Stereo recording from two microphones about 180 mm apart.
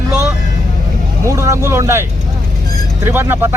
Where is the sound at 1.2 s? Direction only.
15° right (ahead or behind).